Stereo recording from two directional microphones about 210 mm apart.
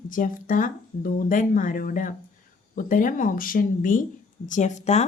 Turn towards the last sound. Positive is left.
turn(degrees=35)  # may be behind; listen again after turning